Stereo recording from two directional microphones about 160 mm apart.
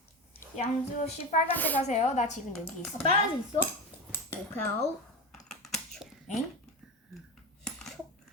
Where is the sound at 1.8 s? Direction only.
45° left (ahead or behind).